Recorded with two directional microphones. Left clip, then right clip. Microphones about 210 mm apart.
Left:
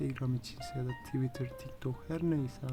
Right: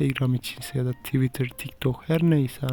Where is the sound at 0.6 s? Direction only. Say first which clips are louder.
Right 9 dB; 65° right (ahead or behind).